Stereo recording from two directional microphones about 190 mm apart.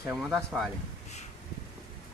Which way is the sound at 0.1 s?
Centre (ahead or behind).